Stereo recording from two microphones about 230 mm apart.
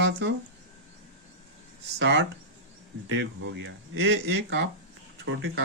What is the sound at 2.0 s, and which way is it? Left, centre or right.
Speech, right.